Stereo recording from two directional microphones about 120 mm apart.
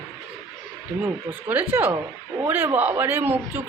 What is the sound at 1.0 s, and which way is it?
A woman's voice, 15° right (ahead or behind).